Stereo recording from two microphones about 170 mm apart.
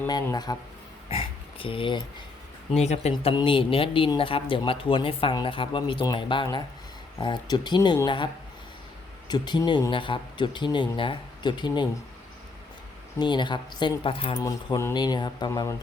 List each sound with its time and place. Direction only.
0.1 s a man's voice: 25° left (ahead or behind)
1.0 s a sound: 35° left (ahead or behind)
2.8 s a man's voice: 40° left (ahead or behind)
13.1 s a man's voice: 25° left (ahead or behind)
14.3 s a man's voice: 15° left (ahead or behind)